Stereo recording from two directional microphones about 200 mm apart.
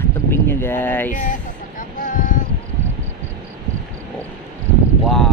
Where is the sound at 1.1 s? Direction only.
40° left (ahead or behind).